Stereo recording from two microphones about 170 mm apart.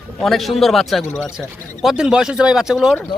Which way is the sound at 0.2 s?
Centre (ahead or behind).